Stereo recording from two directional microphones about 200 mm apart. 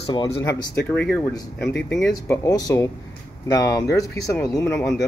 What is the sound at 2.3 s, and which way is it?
Speech, 20° left (ahead or behind).